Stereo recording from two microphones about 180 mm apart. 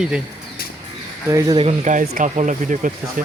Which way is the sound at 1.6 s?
40° right (ahead or behind).